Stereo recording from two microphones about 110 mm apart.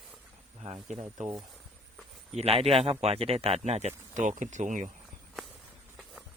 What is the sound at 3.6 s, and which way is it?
Speech, 90° right.